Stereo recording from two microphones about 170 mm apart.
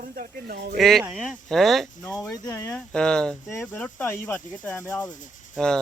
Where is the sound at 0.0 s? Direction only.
60° right (ahead or behind).